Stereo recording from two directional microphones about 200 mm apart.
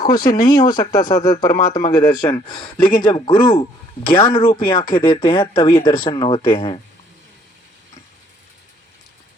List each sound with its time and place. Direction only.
0.0 s speech: 20° left (ahead or behind)